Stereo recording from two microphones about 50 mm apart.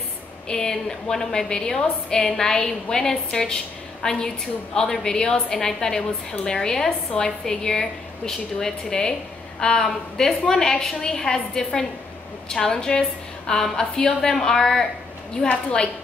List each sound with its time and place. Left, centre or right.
0.5 s a woman's voice: centre
15.4 s a woman's voice: centre